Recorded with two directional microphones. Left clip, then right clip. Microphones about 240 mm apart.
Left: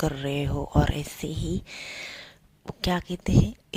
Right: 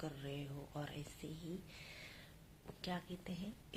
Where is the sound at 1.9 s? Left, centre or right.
Left.